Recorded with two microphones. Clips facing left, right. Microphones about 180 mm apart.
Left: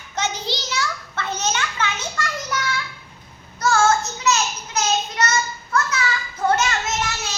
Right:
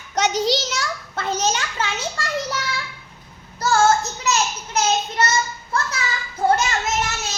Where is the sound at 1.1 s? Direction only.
40° right (ahead or behind).